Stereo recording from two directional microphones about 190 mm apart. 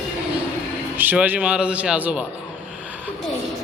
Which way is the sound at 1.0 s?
10° right (ahead or behind).